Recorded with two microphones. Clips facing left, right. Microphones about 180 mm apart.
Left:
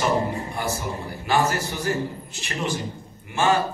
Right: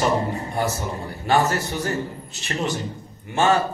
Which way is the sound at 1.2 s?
40° right (ahead or behind).